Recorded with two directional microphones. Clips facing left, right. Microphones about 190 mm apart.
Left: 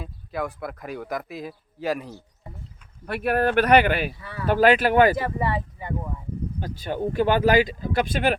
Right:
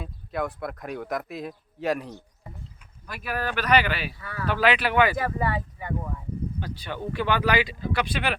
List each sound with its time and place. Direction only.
0.0 s speech: centre (ahead or behind)
3.1 s speech: 60° left (ahead or behind)
4.2 s speech: 25° left (ahead or behind)
4.4 s speech: 45° left (ahead or behind)
5.1 s speech: 25° left (ahead or behind)
6.6 s speech: 45° left (ahead or behind)